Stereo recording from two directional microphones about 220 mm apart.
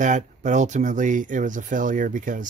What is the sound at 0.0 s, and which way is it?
Speech, 35° right (ahead or behind).